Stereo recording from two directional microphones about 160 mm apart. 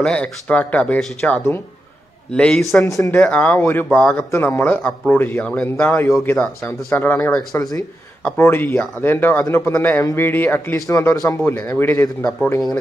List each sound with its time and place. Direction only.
0.0 s a man's voice: 5° left (ahead or behind)
2.8 s speech: 20° left (ahead or behind)
3.2 s a man's voice: 10° left (ahead or behind)